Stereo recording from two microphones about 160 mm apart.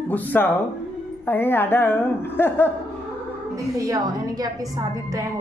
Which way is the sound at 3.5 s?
20° right (ahead or behind).